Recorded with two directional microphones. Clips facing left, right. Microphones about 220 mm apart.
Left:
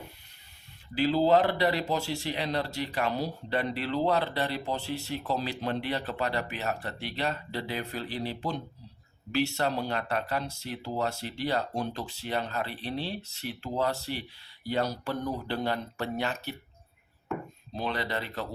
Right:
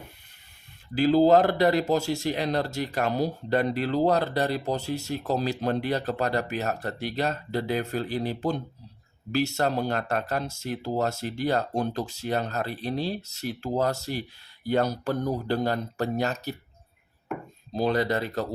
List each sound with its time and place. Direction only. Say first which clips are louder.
0.9 s speech: right 5 dB; 45° right (ahead or behind)
17.7 s speech: right 8 dB; 40° right (ahead or behind)